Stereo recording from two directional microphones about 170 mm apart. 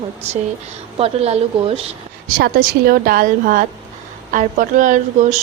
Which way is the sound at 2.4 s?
60° right (ahead or behind).